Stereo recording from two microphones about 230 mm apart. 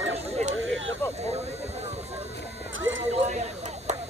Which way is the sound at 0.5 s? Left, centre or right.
Right.